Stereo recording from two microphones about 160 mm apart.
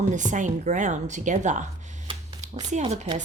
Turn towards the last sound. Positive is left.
turn(degrees=-45)  # may be behind; listen again after turning